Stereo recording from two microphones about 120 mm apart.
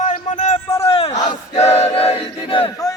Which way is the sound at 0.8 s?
55° left (ahead or behind).